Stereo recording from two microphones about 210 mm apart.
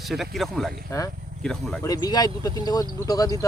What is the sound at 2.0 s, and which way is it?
Speech, 20° left (ahead or behind).